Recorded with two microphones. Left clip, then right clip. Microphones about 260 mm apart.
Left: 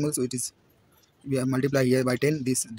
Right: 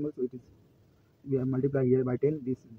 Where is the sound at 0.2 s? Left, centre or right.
Left.